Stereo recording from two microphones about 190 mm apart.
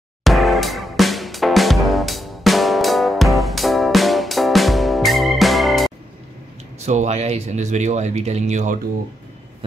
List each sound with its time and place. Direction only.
0.2 s music: centre (ahead or behind)
6.9 s speech: 35° right (ahead or behind)